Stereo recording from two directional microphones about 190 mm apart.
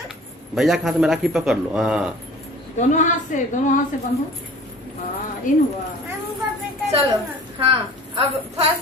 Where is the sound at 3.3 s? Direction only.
40° left (ahead or behind).